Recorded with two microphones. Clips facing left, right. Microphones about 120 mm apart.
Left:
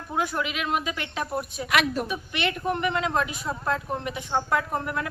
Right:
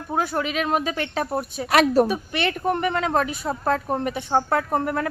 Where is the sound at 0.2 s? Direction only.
40° right (ahead or behind).